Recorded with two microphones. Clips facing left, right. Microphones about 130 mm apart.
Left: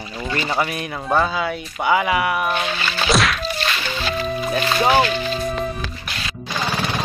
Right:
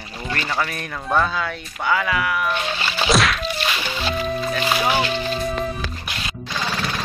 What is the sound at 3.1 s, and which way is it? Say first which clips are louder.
Whack: even; centre (ahead or behind).